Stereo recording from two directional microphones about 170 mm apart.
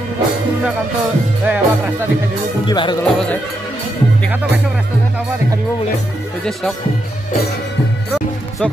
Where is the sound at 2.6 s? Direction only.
25° left (ahead or behind).